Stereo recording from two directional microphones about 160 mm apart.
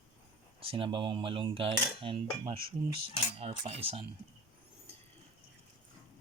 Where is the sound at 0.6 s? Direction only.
35° right (ahead or behind).